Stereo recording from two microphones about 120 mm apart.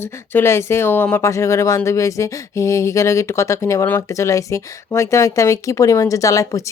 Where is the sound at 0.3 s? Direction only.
20° left (ahead or behind).